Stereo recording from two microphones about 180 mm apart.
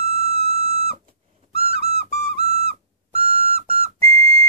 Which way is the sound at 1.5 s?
35° right (ahead or behind).